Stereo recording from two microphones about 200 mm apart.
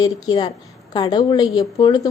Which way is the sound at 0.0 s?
20° left (ahead or behind).